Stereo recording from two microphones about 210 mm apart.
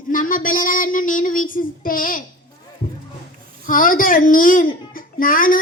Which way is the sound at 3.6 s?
40° left (ahead or behind).